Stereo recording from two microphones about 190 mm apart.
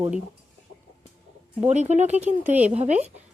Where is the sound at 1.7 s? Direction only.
35° right (ahead or behind).